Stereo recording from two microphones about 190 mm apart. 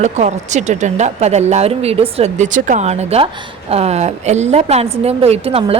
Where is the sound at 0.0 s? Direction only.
35° right (ahead or behind).